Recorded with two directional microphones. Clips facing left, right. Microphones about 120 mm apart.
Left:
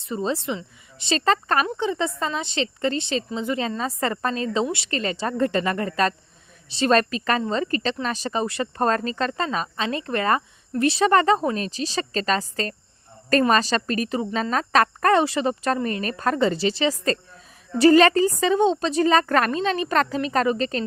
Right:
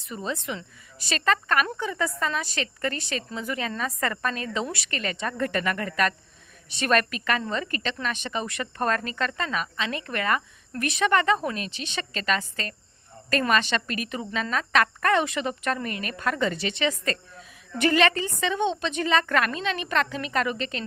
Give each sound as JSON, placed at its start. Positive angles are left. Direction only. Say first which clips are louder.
{"t": 0.0, "sound": "a woman's voice", "louder": "left 6 dB", "side_deg": 30}